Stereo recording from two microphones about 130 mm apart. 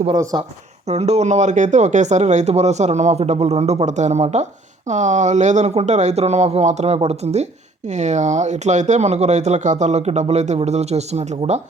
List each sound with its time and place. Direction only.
0.3 s speech: 35° right (ahead or behind)
0.9 s speech: 55° right (ahead or behind)